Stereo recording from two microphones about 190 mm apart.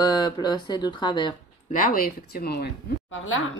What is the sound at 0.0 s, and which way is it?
Speech, 20° left (ahead or behind).